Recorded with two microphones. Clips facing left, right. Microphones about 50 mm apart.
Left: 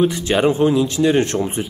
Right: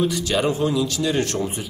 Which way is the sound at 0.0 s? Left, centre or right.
Left.